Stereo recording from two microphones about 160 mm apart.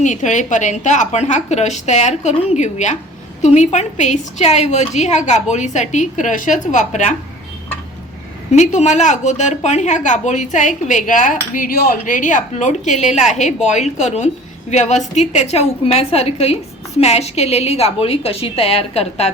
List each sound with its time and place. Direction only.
0.0 s a woman's voice: 50° left (ahead or behind)
8.5 s a woman's voice: 45° left (ahead or behind)